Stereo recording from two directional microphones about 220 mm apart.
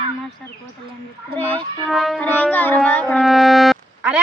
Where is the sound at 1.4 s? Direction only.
5° left (ahead or behind).